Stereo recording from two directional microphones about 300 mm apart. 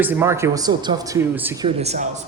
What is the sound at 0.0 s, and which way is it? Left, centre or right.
Speech, centre.